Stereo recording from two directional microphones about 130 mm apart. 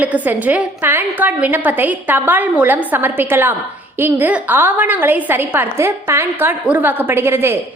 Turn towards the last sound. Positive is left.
turn(degrees=-20)  # may be behind; listen again after turning